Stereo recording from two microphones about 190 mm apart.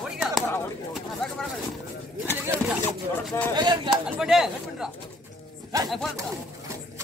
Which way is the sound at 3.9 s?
Centre (ahead or behind).